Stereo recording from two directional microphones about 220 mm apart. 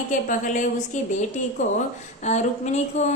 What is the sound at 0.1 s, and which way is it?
Speech, 35° left (ahead or behind).